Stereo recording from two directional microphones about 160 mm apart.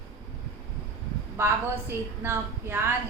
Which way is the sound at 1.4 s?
15° right (ahead or behind).